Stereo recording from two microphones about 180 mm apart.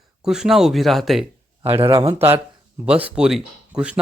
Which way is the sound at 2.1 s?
10° right (ahead or behind).